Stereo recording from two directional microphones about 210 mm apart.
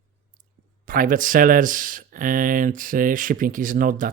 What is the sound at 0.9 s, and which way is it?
Speech, 40° right (ahead or behind).